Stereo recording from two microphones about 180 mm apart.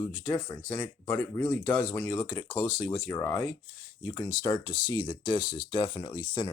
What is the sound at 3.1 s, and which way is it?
Speech, 15° left (ahead or behind).